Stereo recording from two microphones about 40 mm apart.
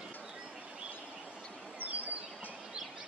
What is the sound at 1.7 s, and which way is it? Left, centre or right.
Bird, right.